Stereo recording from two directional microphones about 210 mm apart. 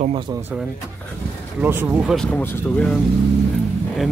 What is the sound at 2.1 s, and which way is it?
Speech, 5° left (ahead or behind).